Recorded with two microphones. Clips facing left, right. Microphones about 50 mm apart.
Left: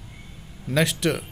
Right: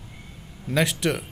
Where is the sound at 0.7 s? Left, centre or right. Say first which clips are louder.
Left 1 dB; right.